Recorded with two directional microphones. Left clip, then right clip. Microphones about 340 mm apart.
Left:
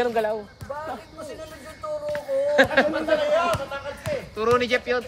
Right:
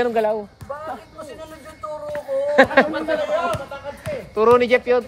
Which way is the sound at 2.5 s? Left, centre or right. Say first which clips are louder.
Right 5 dB; centre.